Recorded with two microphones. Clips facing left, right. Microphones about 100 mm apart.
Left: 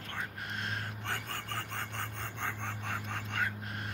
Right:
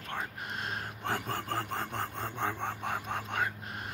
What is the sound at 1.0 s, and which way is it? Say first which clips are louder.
Filing: right 5 dB; 35° right (ahead or behind).